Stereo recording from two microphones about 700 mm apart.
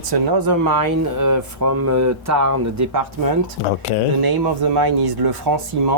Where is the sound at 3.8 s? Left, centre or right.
Left.